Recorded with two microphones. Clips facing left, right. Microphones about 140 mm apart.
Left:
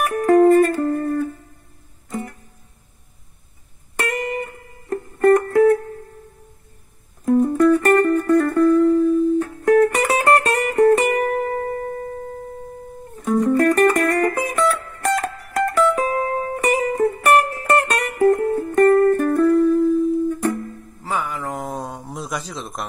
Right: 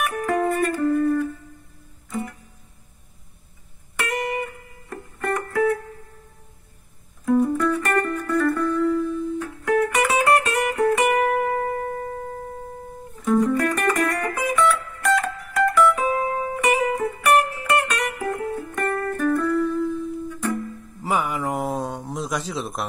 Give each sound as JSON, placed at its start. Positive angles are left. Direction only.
{"t": 0.0, "sound": "music", "side_deg": 45}
{"t": 4.8, "sound": "music", "side_deg": 45}
{"t": 7.2, "sound": "music", "side_deg": 40}
{"t": 13.3, "sound": "music", "side_deg": 45}
{"t": 21.0, "sound": "a sound", "side_deg": -10}